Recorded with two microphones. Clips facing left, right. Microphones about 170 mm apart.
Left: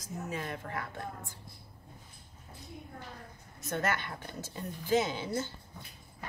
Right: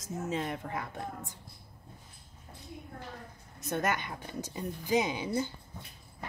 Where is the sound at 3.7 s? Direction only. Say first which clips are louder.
Right 1 dB; 15° right (ahead or behind).